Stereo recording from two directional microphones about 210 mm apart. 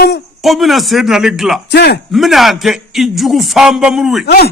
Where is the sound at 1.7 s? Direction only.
50° left (ahead or behind).